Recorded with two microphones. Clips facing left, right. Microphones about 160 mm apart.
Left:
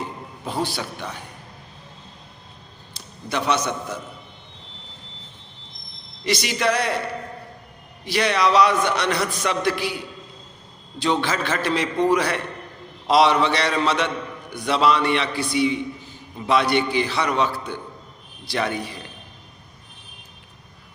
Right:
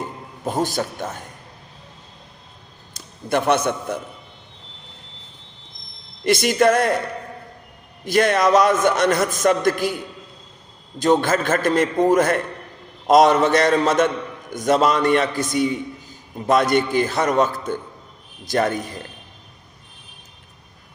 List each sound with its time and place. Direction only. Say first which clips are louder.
0.0 s a man's voice: right 3 dB; 45° right (ahead or behind)
2.9 s a man's voice: right 6 dB; 50° right (ahead or behind)
6.2 s a man's voice: right 6 dB; 50° right (ahead or behind)
8.0 s a man's voice: right 4 dB; 50° right (ahead or behind)
11.0 s a man's voice: right 5 dB; 45° right (ahead or behind)